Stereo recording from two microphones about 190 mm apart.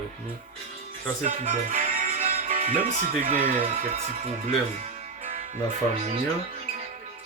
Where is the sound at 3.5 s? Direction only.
30° right (ahead or behind).